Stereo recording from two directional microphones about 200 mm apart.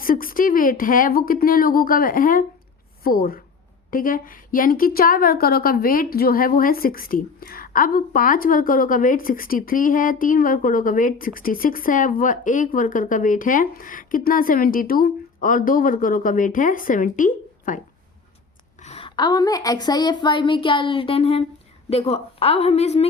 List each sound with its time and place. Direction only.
0.0 s a woman's voice: 45° left (ahead or behind)
18.8 s a woman's voice: 30° left (ahead or behind)